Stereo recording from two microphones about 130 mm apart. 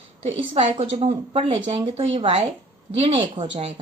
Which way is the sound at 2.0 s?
45° right (ahead or behind).